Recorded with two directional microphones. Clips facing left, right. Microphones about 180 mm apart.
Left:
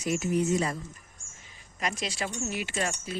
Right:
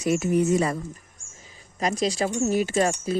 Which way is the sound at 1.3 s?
35° right (ahead or behind).